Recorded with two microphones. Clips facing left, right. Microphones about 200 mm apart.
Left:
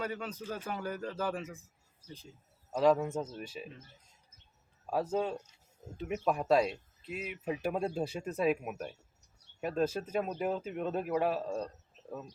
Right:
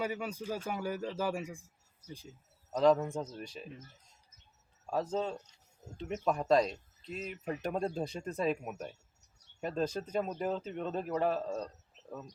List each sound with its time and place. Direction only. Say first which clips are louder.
0.0 s a man's voice: right 2 dB; 10° right (ahead or behind)
2.7 s speech: even; 5° left (ahead or behind)
4.9 s speech: left 2 dB; 10° left (ahead or behind)